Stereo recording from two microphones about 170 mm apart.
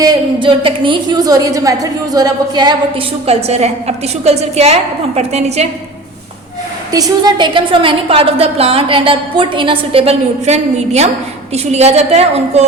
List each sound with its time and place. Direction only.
0.0 s a woman's voice: 25° right (ahead or behind)
3.2 s a woman's voice: 40° right (ahead or behind)
6.9 s a woman's voice: 25° right (ahead or behind); by 12.6 s 40° right (ahead or behind)